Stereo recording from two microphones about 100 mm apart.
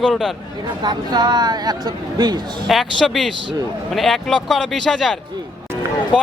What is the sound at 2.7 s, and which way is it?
Speech, centre (ahead or behind).